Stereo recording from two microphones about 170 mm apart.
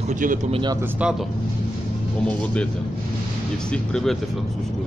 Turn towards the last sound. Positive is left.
turn(degrees=5)  # may be behind; listen again after turning